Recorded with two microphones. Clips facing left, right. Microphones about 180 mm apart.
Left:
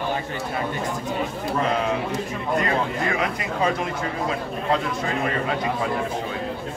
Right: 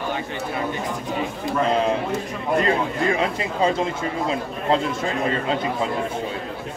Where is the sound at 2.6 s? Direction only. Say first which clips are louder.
Right 3 dB; 25° right (ahead or behind).